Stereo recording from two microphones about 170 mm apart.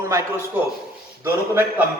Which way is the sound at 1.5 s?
15° right (ahead or behind).